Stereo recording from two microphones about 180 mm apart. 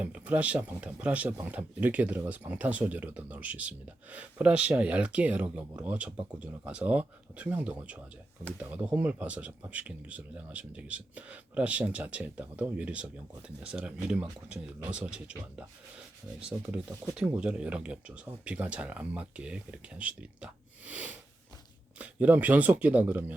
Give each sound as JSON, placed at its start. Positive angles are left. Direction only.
{"t": 0.0, "sound": "speech", "side_deg": -10}